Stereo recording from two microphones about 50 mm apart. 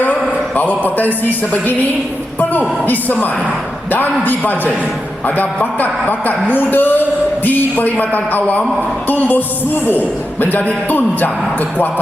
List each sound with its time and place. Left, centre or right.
0.0 s a sound: left
2.4 s a woman's voice: left
5.8 s a woman's voice: left
10.8 s a woman's voice: left